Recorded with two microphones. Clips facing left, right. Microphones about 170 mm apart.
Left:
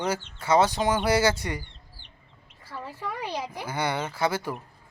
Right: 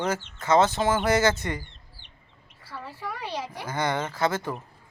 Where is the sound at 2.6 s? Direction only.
15° left (ahead or behind).